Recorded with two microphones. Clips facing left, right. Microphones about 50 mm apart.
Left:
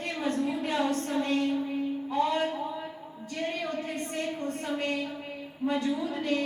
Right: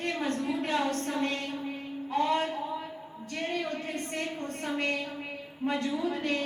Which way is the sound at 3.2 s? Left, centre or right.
Right.